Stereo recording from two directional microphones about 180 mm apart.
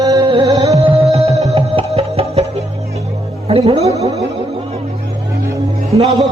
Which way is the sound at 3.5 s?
30° right (ahead or behind).